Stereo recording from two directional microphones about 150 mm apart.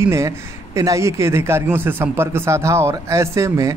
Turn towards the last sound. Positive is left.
turn(degrees=-20)  # may be behind; listen again after turning